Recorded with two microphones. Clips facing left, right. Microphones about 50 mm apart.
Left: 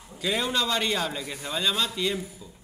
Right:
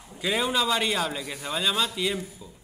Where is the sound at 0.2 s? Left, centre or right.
Centre.